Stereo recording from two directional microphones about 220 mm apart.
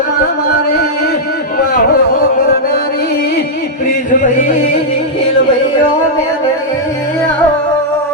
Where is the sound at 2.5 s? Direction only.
45° left (ahead or behind).